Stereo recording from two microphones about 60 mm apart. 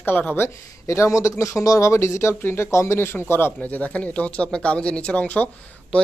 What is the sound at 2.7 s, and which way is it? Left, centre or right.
Speech, left.